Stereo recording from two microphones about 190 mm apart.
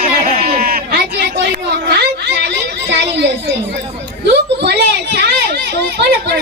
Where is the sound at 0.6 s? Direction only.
50° right (ahead or behind).